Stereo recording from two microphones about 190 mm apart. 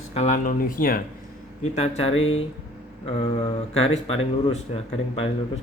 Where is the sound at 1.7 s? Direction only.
35° left (ahead or behind).